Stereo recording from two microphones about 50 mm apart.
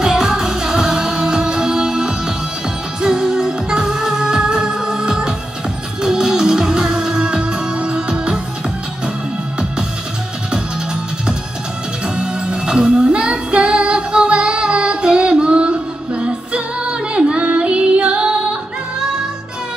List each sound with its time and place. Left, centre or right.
0.0 s music: centre
12.2 s music: centre